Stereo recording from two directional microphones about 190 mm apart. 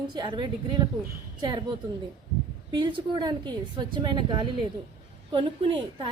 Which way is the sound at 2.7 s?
25° right (ahead or behind).